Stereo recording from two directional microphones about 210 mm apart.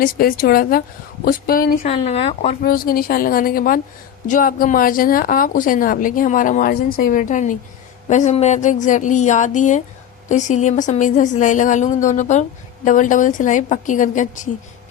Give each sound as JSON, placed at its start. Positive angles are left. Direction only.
{"t": 0.0, "sound": "a woman's voice", "side_deg": 45}
{"t": 1.8, "sound": "speech", "side_deg": 30}
{"t": 2.6, "sound": "a woman's voice", "side_deg": 45}